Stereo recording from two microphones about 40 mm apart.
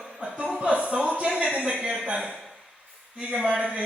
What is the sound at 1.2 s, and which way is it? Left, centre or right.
Speech, right.